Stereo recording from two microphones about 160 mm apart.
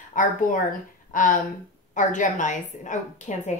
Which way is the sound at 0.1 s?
55° left (ahead or behind).